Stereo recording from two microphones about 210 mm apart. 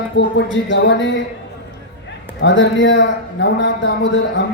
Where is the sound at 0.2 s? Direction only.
60° left (ahead or behind).